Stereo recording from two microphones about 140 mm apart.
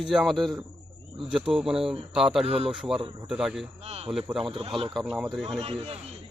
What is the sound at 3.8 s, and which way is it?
Speech, 50° right (ahead or behind).